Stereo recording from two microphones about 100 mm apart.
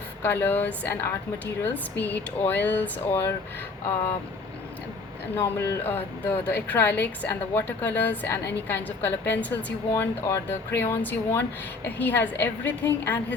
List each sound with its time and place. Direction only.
0.2 s speech: 20° left (ahead or behind)
5.4 s speech: 25° left (ahead or behind)
9.9 s speech: 25° left (ahead or behind)